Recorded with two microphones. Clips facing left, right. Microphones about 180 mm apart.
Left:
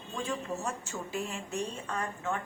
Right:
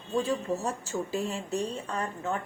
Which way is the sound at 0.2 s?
35° right (ahead or behind).